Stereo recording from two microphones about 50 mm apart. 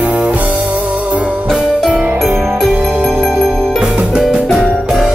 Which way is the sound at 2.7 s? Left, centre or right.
Right.